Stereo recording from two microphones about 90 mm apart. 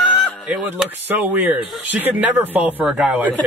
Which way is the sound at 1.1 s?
20° right (ahead or behind).